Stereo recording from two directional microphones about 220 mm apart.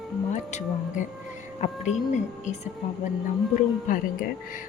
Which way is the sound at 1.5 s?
30° left (ahead or behind).